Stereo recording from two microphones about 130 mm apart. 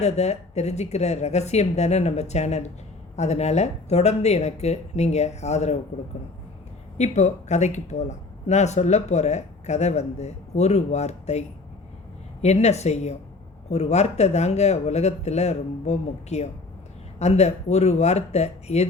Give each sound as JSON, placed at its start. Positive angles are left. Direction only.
{"t": 0.0, "sound": "speech", "side_deg": 55}
{"t": 7.0, "sound": "speech", "side_deg": 60}